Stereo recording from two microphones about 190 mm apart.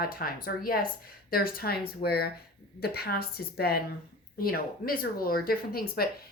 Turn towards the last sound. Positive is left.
turn(degrees=50)  # may be behind; listen again after turning